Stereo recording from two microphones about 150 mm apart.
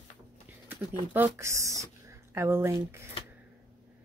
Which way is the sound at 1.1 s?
15° right (ahead or behind).